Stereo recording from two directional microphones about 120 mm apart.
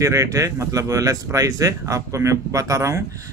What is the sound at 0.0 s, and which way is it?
Speech, 25° right (ahead or behind).